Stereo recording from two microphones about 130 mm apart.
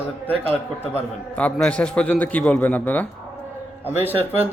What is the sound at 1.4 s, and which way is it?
A man's voice, 10° left (ahead or behind).